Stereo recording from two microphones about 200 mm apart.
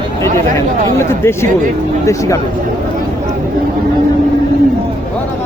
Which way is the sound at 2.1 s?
15° left (ahead or behind).